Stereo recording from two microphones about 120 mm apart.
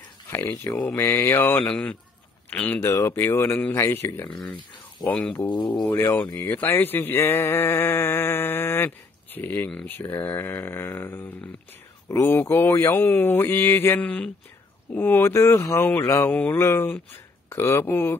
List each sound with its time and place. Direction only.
0.3 s speech: 20° left (ahead or behind)
1.7 s speech: 10° left (ahead or behind)
2.9 s speech: 20° left (ahead or behind)